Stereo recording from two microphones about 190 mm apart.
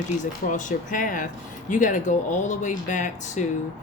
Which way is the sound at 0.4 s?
40° left (ahead or behind).